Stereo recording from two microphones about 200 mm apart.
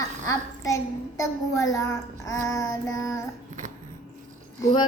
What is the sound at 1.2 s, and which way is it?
Child singing, 15° left (ahead or behind).